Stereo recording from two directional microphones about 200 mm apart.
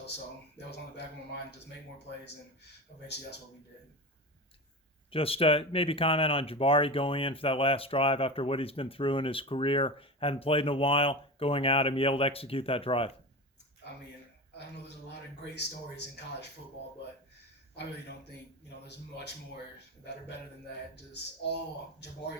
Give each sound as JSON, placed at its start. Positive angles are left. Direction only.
{"t": 0.5, "sound": "speech", "side_deg": 60}
{"t": 3.1, "sound": "speech", "side_deg": 60}
{"t": 5.1, "sound": "speech", "side_deg": 30}
{"t": 15.4, "sound": "speech", "side_deg": 55}
{"t": 18.9, "sound": "speech", "side_deg": 60}